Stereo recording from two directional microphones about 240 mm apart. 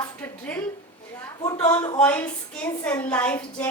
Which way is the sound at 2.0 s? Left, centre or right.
Centre.